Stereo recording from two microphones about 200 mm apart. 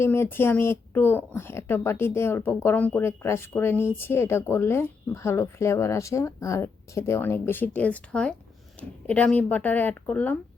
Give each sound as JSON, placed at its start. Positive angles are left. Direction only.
{"t": 0.0, "sound": "speech", "side_deg": 10}